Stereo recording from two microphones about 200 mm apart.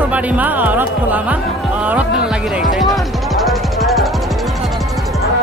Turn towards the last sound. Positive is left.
turn(degrees=0)  # may be behind; listen again after turning